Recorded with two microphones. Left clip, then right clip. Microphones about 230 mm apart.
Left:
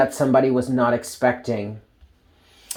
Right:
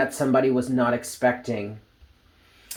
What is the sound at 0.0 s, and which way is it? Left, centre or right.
Speech, centre.